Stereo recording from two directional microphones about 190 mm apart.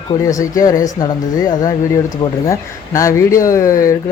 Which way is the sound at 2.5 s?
15° left (ahead or behind).